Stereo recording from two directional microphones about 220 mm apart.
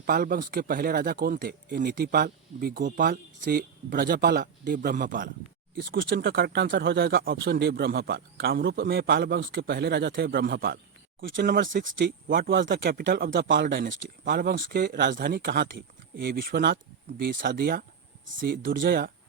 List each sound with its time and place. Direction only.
0.0 s speech: 40° right (ahead or behind)
5.7 s speech: 50° right (ahead or behind)
11.9 s speech: 55° right (ahead or behind)
12.9 s speech: 40° right (ahead or behind)
18.6 s speech: 55° right (ahead or behind)